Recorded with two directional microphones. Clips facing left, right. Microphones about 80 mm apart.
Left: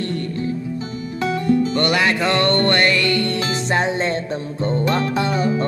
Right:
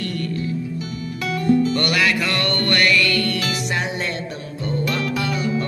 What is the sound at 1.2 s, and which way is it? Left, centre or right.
Music, left.